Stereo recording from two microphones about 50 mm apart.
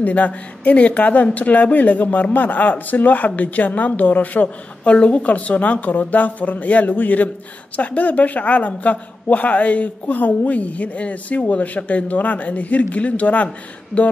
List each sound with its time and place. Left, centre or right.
0.0 s speech: left